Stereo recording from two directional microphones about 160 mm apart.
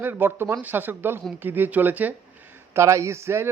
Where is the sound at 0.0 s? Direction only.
15° right (ahead or behind).